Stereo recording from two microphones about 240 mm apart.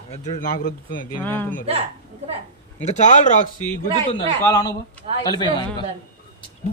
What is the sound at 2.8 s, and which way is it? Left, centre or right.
Speech, left.